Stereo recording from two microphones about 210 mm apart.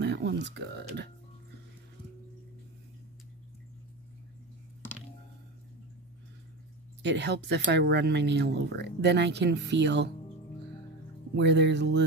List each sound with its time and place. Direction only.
0.0 s speech: 55° right (ahead or behind)
7.0 s speech: 55° right (ahead or behind)
11.3 s speech: 55° right (ahead or behind)